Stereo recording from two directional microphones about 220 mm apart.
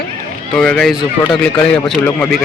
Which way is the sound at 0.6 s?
5° left (ahead or behind).